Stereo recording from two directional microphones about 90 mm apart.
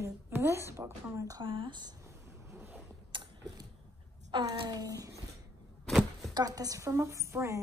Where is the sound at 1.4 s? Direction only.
65° right (ahead or behind).